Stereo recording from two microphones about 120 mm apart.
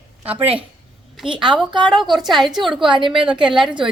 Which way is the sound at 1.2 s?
45° right (ahead or behind).